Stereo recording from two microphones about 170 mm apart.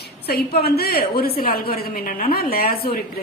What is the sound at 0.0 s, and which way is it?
A woman's voice, 70° left (ahead or behind).